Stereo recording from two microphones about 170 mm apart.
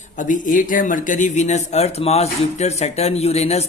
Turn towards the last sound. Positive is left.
turn(degrees=40)  # may be behind; listen again after turning